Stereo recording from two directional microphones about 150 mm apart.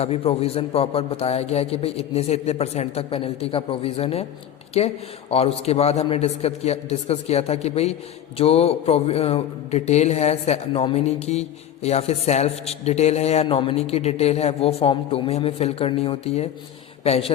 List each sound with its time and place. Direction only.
0.0 s speech: 40° left (ahead or behind)
5.3 s a woman's voice: 40° left (ahead or behind)